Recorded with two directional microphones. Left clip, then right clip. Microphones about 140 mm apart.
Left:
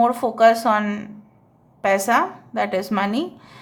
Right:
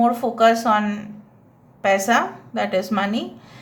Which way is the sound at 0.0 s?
40° left (ahead or behind).